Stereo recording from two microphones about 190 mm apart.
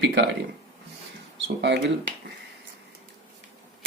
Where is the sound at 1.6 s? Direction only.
65° right (ahead or behind).